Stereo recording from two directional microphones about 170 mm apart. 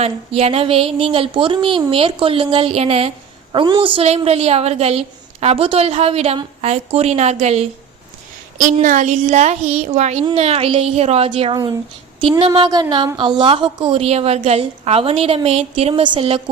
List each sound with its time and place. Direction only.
0.0 s a woman's voice: 40° right (ahead or behind)
12.5 s a sound: 25° right (ahead or behind)
13.4 s a woman's voice: 30° right (ahead or behind)